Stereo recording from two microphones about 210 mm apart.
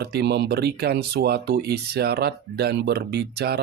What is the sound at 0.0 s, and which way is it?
Speech, 50° right (ahead or behind).